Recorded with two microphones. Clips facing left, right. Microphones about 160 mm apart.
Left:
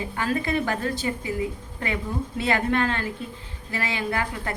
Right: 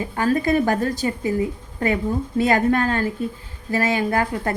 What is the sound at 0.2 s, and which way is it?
A woman's voice, 40° right (ahead or behind).